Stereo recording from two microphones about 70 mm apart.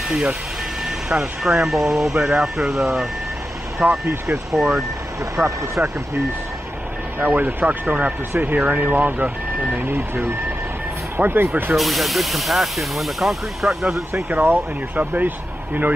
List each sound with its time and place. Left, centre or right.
0.1 s speech: centre
3.8 s speech: right
4.5 s speech: centre
5.3 s speech: right
7.2 s speech: right
11.7 s speech: centre
14.3 s speech: right